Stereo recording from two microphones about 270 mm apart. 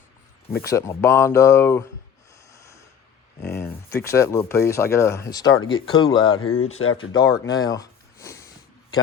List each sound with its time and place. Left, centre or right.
0.6 s speech: centre
2.5 s snort: centre
3.4 s speech: centre
6.7 s speech: left
7.1 s speech: centre